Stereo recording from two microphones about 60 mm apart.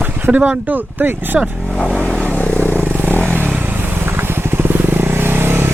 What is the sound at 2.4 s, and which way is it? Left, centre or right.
Vehicle, left.